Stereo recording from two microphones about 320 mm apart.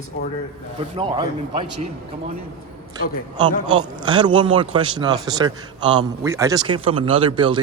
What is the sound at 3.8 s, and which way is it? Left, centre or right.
Speech, centre.